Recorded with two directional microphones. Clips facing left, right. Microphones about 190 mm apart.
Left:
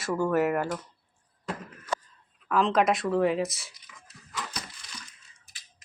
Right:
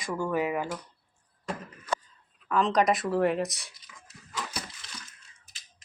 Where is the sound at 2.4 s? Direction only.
Centre (ahead or behind).